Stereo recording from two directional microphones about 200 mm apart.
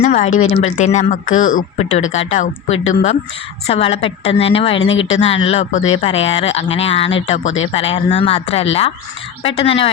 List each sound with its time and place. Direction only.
0.0 s a woman's voice: 40° left (ahead or behind)
4.9 s speech: 80° left
5.5 s speech: 30° left (ahead or behind)
7.4 s speech: 80° left
7.7 s a woman's voice: 30° left (ahead or behind)